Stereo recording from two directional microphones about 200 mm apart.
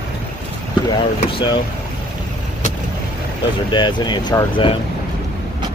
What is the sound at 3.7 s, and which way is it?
Speech, 20° left (ahead or behind).